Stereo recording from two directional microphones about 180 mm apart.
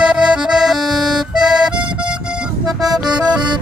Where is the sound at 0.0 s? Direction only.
5° right (ahead or behind).